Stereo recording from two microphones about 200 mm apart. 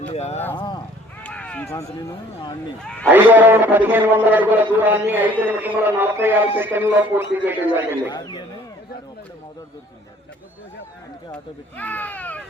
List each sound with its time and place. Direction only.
0.1 s speech: 30° left (ahead or behind)
1.2 s a sound: 5° left (ahead or behind)
2.8 s speech: 5° left (ahead or behind)
3.1 s a man's voice: 10° right (ahead or behind)
8.1 s speech: 20° left (ahead or behind)
11.8 s speech: 10° left (ahead or behind)